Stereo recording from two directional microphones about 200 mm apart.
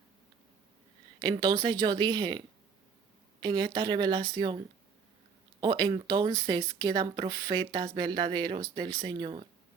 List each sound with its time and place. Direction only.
1.2 s speech: 20° right (ahead or behind)
3.4 s speech: 20° right (ahead or behind)
5.5 s speech: 20° right (ahead or behind)